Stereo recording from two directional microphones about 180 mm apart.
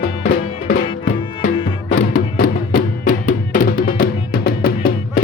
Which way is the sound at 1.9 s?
50° left (ahead or behind).